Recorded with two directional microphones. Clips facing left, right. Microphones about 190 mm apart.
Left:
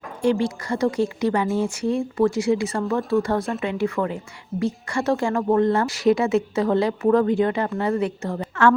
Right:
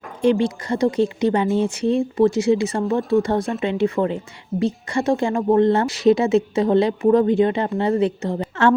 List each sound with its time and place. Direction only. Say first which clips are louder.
0.2 s a woman's voice: right 3 dB; 20° right (ahead or behind)